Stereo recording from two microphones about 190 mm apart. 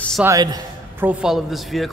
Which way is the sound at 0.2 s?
20° right (ahead or behind).